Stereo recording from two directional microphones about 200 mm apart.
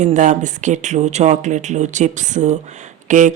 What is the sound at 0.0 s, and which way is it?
Speech, 35° right (ahead or behind).